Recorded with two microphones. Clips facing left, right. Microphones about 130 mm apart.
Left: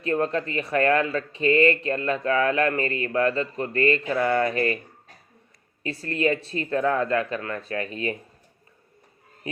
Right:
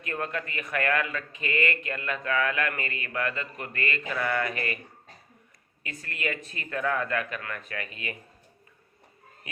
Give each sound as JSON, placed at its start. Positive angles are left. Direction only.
{"t": 0.0, "sound": "speech", "side_deg": 30}
{"t": 5.8, "sound": "speech", "side_deg": 35}